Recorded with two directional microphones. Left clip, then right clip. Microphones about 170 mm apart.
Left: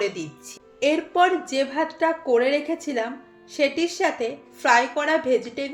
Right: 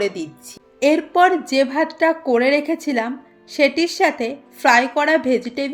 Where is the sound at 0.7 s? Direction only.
55° right (ahead or behind).